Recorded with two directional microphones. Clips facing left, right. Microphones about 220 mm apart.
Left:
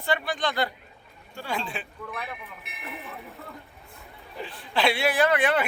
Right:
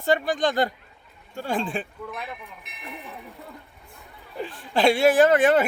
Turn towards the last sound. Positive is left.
turn(degrees=-45)  # may be behind; listen again after turning